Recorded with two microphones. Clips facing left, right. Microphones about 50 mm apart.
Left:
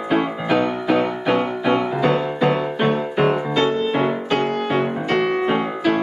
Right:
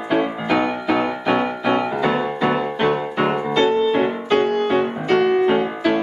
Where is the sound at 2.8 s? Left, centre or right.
Centre.